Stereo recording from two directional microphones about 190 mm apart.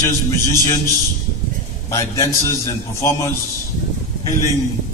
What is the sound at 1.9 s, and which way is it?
Speech, 15° left (ahead or behind).